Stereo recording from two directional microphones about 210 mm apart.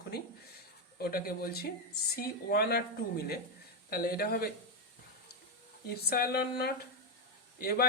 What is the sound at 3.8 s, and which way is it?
Speech, 45° left (ahead or behind).